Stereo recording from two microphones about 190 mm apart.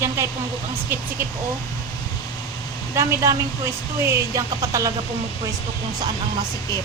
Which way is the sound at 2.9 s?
15° right (ahead or behind).